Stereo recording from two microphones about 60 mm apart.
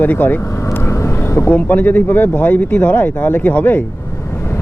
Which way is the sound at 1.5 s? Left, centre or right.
Left.